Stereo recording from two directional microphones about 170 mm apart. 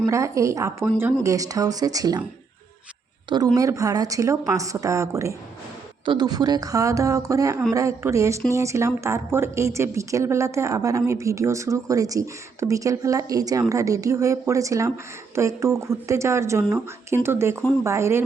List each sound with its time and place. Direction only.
0.0 s speech: 20° right (ahead or behind)
3.2 s speech: 25° right (ahead or behind)